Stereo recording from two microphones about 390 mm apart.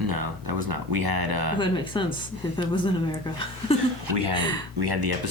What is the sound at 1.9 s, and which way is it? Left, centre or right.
Speech, centre.